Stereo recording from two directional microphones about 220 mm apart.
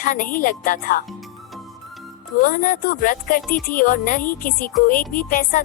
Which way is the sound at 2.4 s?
35° left (ahead or behind).